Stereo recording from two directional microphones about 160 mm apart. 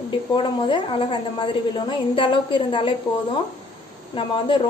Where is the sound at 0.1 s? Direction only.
30° left (ahead or behind).